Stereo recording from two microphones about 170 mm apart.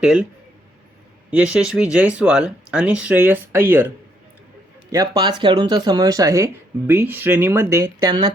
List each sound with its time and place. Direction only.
0.0 s speech: 5° right (ahead or behind)
1.3 s speech: 5° right (ahead or behind)
4.9 s speech: 25° right (ahead or behind)